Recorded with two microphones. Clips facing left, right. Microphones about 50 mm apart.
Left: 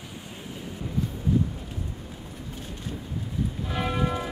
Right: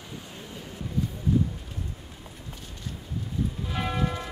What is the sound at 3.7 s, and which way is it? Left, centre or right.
Church bell, centre.